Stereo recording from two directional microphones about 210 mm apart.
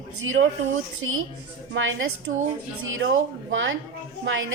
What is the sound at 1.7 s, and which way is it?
A woman's voice, 65° right (ahead or behind).